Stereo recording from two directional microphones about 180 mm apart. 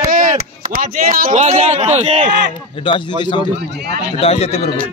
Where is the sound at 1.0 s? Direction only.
50° right (ahead or behind).